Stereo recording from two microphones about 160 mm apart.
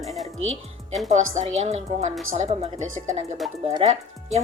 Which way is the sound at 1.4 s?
45° right (ahead or behind).